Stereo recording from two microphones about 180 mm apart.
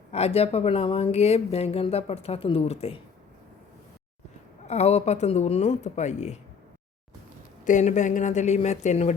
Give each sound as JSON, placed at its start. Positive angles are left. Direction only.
{"t": 0.1, "sound": "speech", "side_deg": 35}
{"t": 4.6, "sound": "speech", "side_deg": 40}
{"t": 7.6, "sound": "speech", "side_deg": 45}